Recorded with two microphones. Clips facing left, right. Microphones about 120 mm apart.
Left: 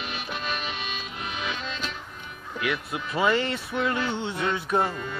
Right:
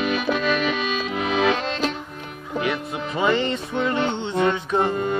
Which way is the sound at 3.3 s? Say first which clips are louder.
Right 3 dB; 5° left (ahead or behind).